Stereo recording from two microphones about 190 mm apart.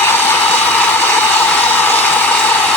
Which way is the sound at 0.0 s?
10° left (ahead or behind).